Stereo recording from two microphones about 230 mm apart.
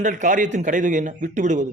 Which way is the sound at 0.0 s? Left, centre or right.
Right.